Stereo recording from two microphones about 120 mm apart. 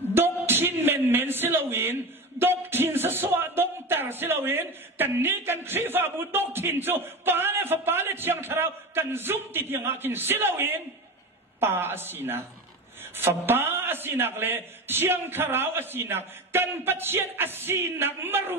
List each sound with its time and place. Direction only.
0.1 s a man's voice: 20° right (ahead or behind)